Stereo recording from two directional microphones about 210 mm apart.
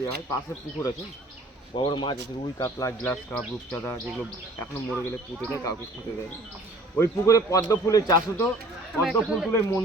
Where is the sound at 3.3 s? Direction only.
5° left (ahead or behind).